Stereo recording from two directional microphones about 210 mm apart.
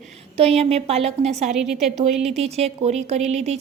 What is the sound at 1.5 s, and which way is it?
Speech, centre (ahead or behind).